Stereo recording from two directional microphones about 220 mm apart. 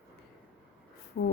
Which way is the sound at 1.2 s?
40° left (ahead or behind).